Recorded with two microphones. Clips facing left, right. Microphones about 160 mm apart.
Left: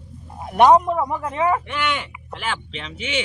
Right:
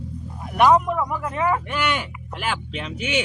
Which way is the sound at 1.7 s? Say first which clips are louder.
Right 1 dB; 10° right (ahead or behind).